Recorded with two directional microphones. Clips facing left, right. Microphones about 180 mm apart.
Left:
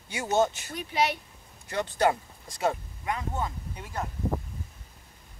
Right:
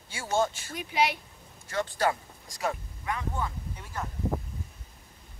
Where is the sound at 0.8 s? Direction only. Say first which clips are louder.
Even; 10° right (ahead or behind).